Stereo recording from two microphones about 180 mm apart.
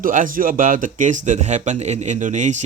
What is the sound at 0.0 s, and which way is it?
Speech, 50° right (ahead or behind).